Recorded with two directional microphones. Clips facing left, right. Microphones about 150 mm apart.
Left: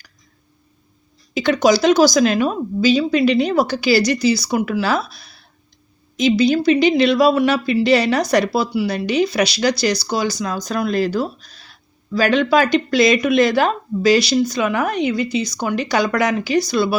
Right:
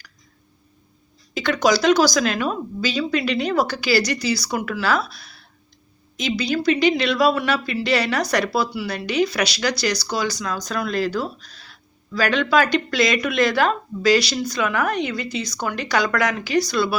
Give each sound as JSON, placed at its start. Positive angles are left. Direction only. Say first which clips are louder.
{"t": 1.3, "sound": "speech", "louder": "left 4 dB", "side_deg": 20}
{"t": 6.2, "sound": "speech", "louder": "left 6 dB", "side_deg": 25}
{"t": 12.4, "sound": "speech", "louder": "left 1 dB", "side_deg": 25}